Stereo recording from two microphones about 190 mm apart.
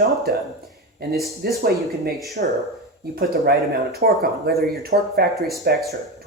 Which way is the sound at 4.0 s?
55° right (ahead or behind).